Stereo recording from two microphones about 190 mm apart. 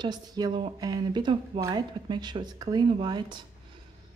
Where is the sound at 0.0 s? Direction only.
20° right (ahead or behind).